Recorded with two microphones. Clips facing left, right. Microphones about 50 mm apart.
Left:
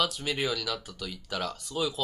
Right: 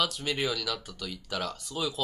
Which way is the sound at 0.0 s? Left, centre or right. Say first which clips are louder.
Even; centre.